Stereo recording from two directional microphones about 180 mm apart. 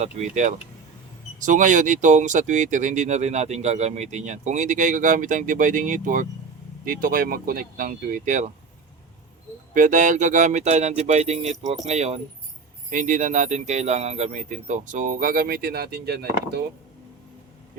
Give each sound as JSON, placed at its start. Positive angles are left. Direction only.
{"t": 0.0, "sound": "speech", "side_deg": -40}
{"t": 9.7, "sound": "speech", "side_deg": -45}